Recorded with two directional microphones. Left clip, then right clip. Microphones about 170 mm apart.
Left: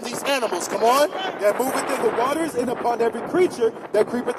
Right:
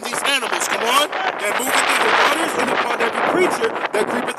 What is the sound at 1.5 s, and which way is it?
Speech, 10° right (ahead or behind).